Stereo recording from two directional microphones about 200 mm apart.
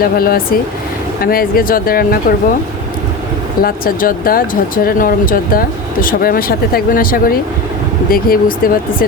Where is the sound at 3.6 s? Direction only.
45° left (ahead or behind).